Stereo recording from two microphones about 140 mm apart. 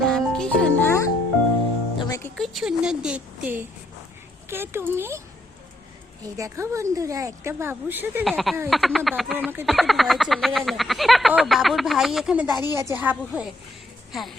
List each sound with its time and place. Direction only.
0.0 s music: 5° left (ahead or behind); by 2.3 s 25° left (ahead or behind)
2.3 s a woman's voice: centre (ahead or behind); by 5.2 s 15° right (ahead or behind)
6.2 s speech: 20° right (ahead or behind)
8.2 s speech: centre (ahead or behind)
9.3 s a woman's voice: 10° right (ahead or behind)
9.6 s speech: centre (ahead or behind)
12.7 s a woman's voice: 20° right (ahead or behind); by 14.3 s centre (ahead or behind)